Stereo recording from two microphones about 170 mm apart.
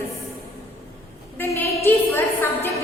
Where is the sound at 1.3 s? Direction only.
15° left (ahead or behind).